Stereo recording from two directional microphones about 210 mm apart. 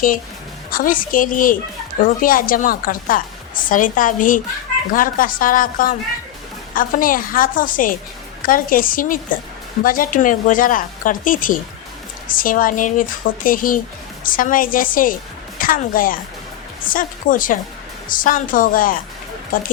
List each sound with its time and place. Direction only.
0.7 s a woman's voice: 40° left (ahead or behind)